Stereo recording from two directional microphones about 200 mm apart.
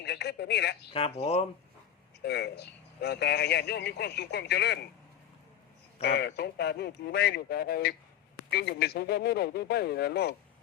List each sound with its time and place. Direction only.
0.0 s speech: 55° left (ahead or behind)
0.9 s speech: 30° left (ahead or behind)
2.2 s speech: 55° left (ahead or behind)
6.0 s speech: 60° left (ahead or behind)